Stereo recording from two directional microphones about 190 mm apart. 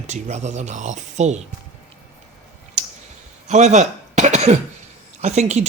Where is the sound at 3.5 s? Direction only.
35° right (ahead or behind).